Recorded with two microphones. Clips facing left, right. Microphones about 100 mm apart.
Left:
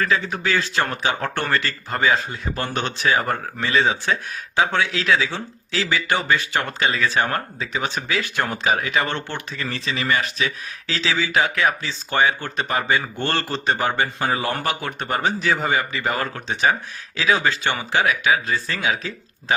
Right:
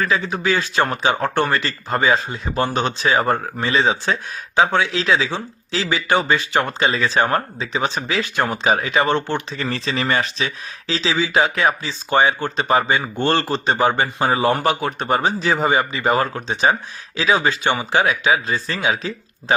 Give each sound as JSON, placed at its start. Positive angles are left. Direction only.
{"t": 0.0, "sound": "speech", "side_deg": -20}
{"t": 9.6, "sound": "speech", "side_deg": -35}